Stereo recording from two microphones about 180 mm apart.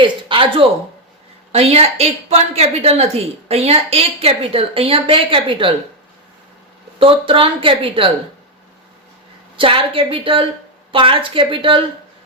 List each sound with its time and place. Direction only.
0.0 s a woman's voice: 30° right (ahead or behind)
7.0 s speech: 30° right (ahead or behind)
9.6 s speech: 30° right (ahead or behind)